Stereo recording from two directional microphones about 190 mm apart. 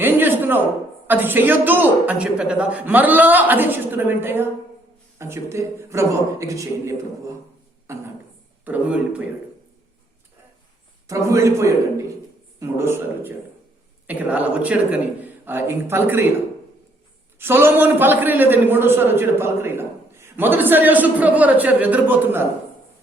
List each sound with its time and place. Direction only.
0.0 s a sound: 10° right (ahead or behind)
1.0 s a man's voice: 10° right (ahead or behind)
11.1 s a man's voice: 15° right (ahead or behind)
17.3 s a man's voice: 10° right (ahead or behind)